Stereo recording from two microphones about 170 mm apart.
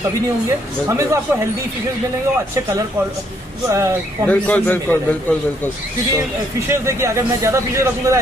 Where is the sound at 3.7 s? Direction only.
15° right (ahead or behind).